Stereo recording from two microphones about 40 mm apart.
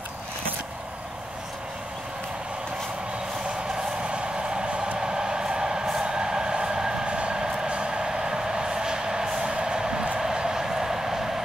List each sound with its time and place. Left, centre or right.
4.1 s vehicle: right
5.0 s train: centre
10.2 s vehicle: centre